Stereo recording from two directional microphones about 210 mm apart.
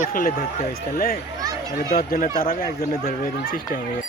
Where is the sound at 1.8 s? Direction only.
45° left (ahead or behind).